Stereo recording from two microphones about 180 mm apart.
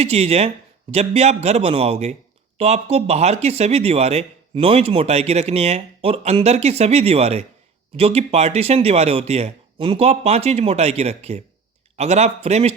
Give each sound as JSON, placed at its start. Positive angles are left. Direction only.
{"t": 0.0, "sound": "speech", "side_deg": -35}